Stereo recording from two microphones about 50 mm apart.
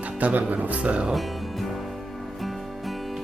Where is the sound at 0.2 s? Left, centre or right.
Right.